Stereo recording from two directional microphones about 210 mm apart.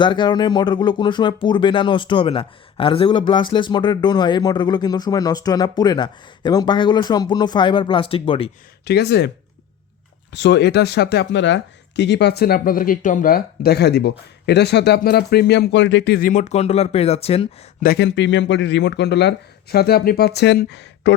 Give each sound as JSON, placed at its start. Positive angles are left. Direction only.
{"t": 0.0, "sound": "speech", "side_deg": 20}
{"t": 8.8, "sound": "speech", "side_deg": 50}
{"t": 10.3, "sound": "speech", "side_deg": 55}
{"t": 17.8, "sound": "speech", "side_deg": 55}